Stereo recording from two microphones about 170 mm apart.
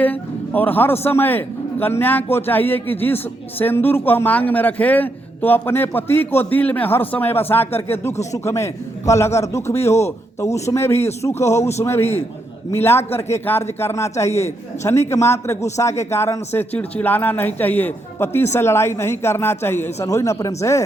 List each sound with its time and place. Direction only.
0.0 s a man's voice: 10° left (ahead or behind)